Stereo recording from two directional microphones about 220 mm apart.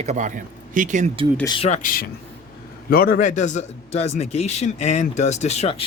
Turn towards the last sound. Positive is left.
turn(degrees=30)  # may be behind; listen again after turning